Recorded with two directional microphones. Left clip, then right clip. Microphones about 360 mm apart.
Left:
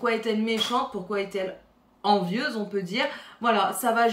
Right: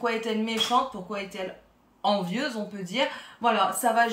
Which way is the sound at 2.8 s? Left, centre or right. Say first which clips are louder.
Even; centre.